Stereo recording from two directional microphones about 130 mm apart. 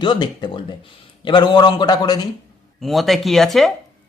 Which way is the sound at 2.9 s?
Centre (ahead or behind).